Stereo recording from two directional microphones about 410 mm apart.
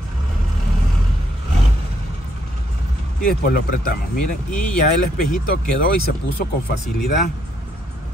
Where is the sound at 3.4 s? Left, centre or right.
Left.